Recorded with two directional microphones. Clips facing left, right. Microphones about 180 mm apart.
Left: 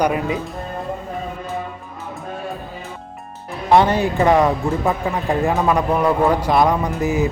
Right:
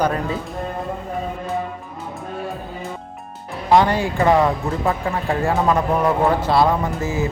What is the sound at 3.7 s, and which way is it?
Speech, 20° left (ahead or behind).